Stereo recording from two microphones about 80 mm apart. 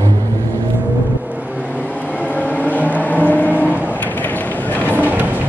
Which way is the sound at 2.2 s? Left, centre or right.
Centre.